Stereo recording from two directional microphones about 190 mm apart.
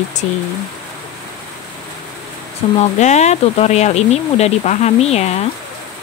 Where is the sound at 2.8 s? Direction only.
35° left (ahead or behind).